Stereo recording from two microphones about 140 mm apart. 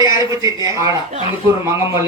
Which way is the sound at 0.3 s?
25° right (ahead or behind).